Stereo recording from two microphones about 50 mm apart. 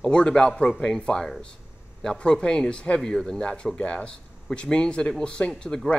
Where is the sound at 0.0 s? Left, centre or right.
Centre.